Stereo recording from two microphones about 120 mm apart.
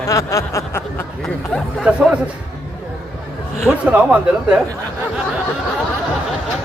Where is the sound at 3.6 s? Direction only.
10° right (ahead or behind).